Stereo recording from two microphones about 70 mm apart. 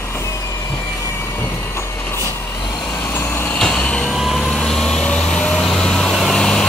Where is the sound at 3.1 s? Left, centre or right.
Left.